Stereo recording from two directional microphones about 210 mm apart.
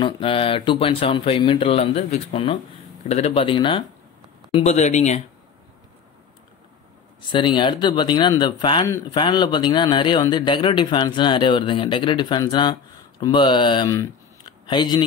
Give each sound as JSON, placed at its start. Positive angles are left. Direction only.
{"t": 0.0, "sound": "speech", "side_deg": 25}
{"t": 7.2, "sound": "speech", "side_deg": 20}